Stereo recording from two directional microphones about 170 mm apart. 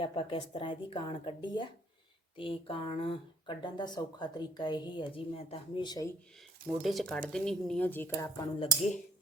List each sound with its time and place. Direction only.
0.0 s speech: 30° left (ahead or behind)
6.7 s speech: centre (ahead or behind); by 8.4 s 20° left (ahead or behind)